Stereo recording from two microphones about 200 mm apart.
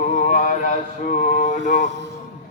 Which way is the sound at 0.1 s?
40° left (ahead or behind).